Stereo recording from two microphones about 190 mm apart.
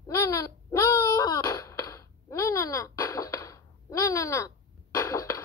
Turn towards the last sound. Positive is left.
turn(degrees=15)  # may be behind; listen again after turning